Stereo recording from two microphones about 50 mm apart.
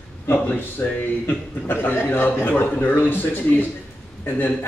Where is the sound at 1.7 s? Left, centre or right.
Left.